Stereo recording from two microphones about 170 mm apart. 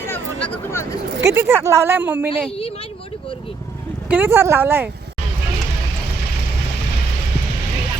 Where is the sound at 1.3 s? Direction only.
15° right (ahead or behind).